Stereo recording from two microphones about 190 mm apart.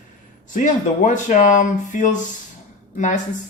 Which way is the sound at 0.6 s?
40° left (ahead or behind).